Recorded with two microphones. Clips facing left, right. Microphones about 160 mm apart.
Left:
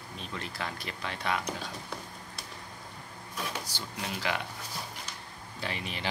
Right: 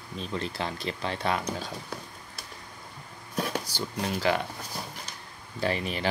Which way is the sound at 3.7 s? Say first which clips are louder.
Right 7 dB; 35° right (ahead or behind).